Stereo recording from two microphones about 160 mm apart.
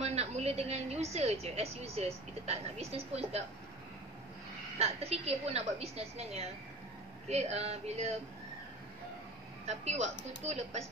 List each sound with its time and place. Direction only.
0.0 s a woman's voice: 40° right (ahead or behind)
4.7 s a woman's voice: 40° right (ahead or behind)
9.7 s speech: 45° right (ahead or behind)